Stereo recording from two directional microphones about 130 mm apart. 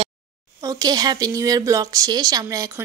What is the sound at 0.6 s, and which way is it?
A woman's voice, 30° right (ahead or behind).